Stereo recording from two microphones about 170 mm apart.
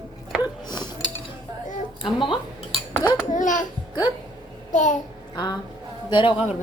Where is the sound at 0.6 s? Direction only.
25° left (ahead or behind).